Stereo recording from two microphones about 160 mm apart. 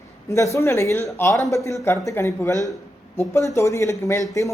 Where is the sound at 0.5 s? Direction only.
20° left (ahead or behind).